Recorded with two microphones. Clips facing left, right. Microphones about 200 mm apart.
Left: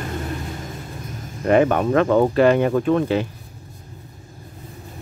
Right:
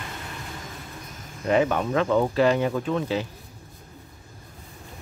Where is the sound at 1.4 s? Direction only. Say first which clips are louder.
Left 6 dB; 55° left (ahead or behind).